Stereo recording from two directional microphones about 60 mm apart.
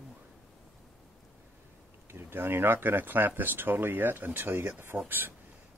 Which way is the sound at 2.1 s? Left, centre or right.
Right.